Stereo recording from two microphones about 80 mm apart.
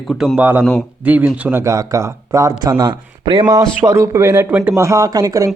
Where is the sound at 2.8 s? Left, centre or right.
Right.